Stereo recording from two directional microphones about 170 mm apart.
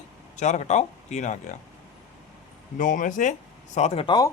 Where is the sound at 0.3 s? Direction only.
45° left (ahead or behind).